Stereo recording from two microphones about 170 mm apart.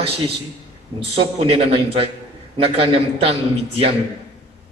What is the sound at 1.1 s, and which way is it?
A man's voice, 35° right (ahead or behind).